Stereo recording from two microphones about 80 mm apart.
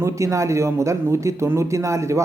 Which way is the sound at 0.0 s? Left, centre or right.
Right.